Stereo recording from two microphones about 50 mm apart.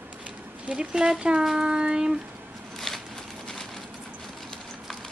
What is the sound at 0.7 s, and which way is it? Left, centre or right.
Speech, centre.